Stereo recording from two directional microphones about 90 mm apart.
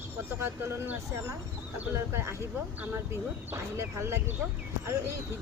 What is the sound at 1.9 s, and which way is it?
Speech, 30° right (ahead or behind).